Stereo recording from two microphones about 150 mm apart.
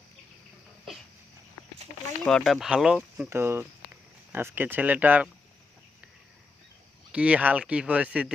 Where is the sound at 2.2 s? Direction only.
Centre (ahead or behind).